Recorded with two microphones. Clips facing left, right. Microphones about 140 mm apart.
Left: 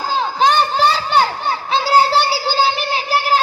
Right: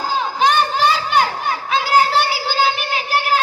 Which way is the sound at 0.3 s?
35° left (ahead or behind).